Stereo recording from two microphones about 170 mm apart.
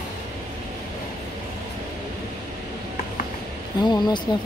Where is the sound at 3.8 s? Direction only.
25° left (ahead or behind).